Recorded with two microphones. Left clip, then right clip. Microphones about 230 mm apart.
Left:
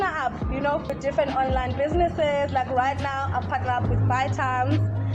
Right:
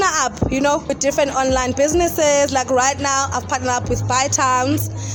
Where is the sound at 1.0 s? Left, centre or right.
Right.